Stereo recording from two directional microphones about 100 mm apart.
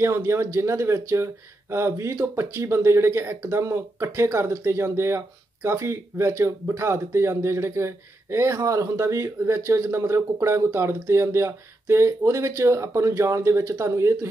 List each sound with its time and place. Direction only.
0.0 s speech: 30° right (ahead or behind)